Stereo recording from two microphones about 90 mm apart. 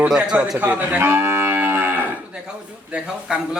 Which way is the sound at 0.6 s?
20° right (ahead or behind).